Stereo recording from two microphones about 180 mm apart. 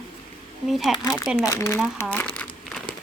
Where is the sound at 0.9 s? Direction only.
20° left (ahead or behind).